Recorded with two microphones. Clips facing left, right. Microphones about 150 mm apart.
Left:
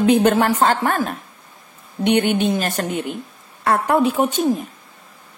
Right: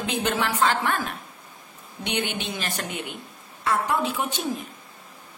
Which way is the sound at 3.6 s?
55° left (ahead or behind).